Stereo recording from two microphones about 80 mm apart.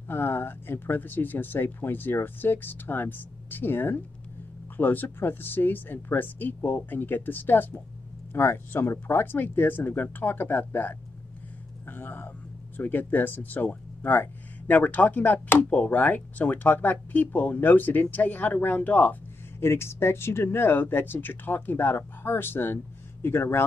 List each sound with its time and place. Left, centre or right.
0.1 s speech: left